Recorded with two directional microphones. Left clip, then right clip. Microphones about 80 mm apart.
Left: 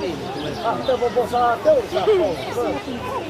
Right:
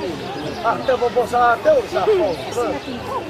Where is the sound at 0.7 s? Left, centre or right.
Centre.